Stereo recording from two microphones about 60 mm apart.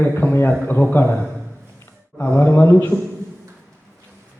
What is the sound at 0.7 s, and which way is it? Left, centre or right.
Speech, left.